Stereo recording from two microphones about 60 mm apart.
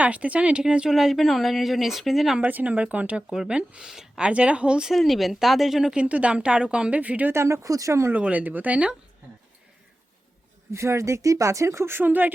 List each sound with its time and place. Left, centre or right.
0.0 s a woman's voice: right
0.9 s speech: centre
2.4 s a woman's voice: right
3.2 s speech: centre
4.3 s a woman's voice: centre
4.9 s speech: centre
6.0 s a woman's voice: right
7.3 s speech: right
8.1 s a woman's voice: right
10.7 s speech: right